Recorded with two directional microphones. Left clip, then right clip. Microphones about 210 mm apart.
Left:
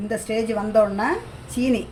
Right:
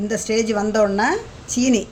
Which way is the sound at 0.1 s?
45° right (ahead or behind).